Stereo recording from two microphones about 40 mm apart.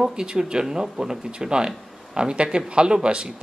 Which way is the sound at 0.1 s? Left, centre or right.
Centre.